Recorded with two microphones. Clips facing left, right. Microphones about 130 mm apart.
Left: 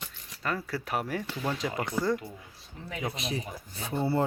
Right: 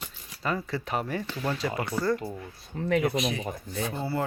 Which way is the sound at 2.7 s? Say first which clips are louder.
Right 12 dB; 65° right (ahead or behind).